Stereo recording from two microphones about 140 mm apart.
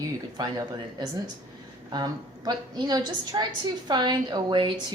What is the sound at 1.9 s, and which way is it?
A woman's voice, 30° right (ahead or behind).